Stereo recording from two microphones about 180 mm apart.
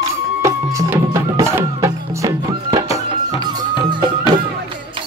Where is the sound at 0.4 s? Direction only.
15° right (ahead or behind).